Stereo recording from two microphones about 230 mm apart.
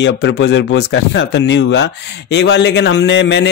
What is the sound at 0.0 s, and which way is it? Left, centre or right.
Speech, left.